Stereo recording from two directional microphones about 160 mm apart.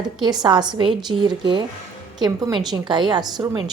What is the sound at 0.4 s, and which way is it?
A woman's voice, 25° right (ahead or behind).